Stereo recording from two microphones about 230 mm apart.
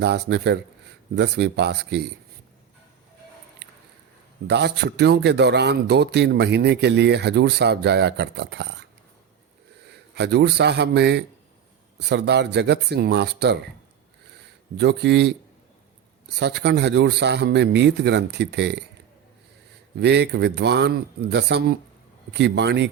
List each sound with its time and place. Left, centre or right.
0.0 s a man's voice: right
3.6 s a sound: right
4.4 s a man's voice: right
9.8 s a man's voice: right
14.8 s a man's voice: right
16.4 s a man's voice: right
20.0 s a man's voice: right